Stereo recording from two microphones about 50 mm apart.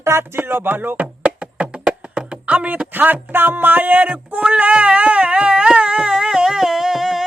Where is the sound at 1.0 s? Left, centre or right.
Right.